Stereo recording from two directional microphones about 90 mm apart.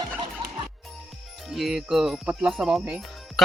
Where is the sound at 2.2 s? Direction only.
10° right (ahead or behind).